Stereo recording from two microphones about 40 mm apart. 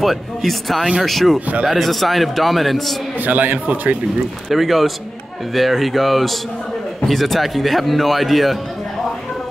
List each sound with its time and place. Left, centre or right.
0.0 s a man's voice: centre
3.2 s a man's voice: right
4.5 s a man's voice: centre